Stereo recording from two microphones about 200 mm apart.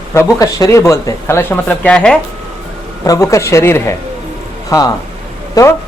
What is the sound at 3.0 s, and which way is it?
A woman's voice, 15° left (ahead or behind).